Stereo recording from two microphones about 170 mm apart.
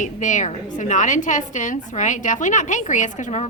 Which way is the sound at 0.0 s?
45° left (ahead or behind).